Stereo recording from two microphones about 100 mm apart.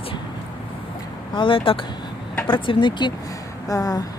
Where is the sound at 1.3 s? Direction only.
60° left (ahead or behind).